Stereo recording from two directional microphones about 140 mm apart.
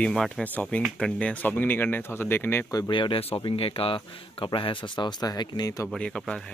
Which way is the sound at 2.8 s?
35° left (ahead or behind).